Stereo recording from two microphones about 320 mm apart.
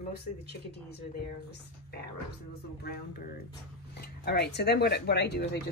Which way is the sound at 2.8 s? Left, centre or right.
Left.